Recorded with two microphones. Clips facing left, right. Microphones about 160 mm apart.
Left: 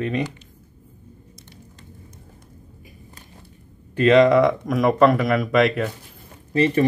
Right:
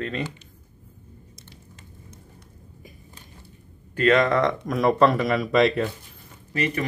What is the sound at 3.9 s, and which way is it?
Speech, 20° left (ahead or behind).